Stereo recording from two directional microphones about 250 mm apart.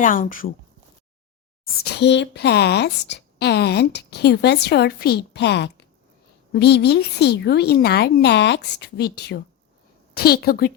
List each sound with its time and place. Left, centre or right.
0.0 s a woman's voice: left
1.8 s a woman's voice: left